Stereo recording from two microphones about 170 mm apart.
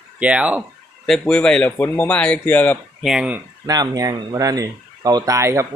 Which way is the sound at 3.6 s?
20° right (ahead or behind).